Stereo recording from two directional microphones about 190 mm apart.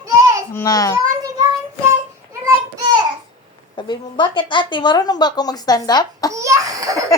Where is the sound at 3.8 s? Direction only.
25° left (ahead or behind).